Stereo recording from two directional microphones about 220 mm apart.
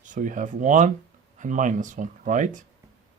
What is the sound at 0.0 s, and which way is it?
Speech, 35° right (ahead or behind).